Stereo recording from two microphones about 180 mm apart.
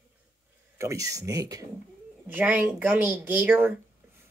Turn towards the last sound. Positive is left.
turn(degrees=-10)  # may be behind; listen again after turning